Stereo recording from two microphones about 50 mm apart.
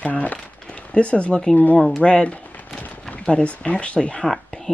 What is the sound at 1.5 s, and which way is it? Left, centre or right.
Speech, left.